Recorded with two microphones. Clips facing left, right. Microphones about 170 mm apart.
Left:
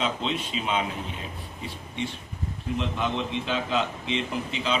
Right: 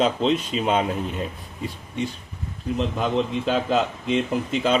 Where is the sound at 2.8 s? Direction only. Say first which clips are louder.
Right 6 dB; 40° right (ahead or behind).